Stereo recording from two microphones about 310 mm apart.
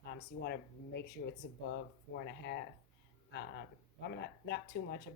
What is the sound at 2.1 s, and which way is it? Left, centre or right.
Speech, left.